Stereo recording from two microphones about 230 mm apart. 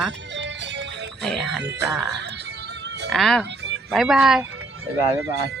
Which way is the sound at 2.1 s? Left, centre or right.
Right.